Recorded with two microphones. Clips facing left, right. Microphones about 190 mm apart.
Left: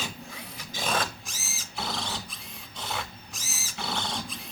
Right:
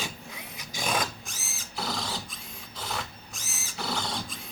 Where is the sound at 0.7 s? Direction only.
15° right (ahead or behind).